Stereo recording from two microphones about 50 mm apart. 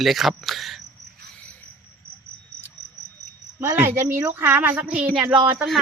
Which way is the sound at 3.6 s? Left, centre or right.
Right.